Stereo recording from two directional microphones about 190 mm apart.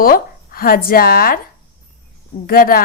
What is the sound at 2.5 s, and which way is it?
Speech, 50° left (ahead or behind).